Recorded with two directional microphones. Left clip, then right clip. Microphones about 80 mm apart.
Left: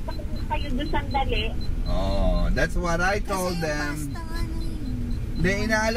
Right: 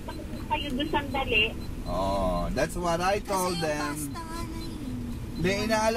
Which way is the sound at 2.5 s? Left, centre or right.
Left.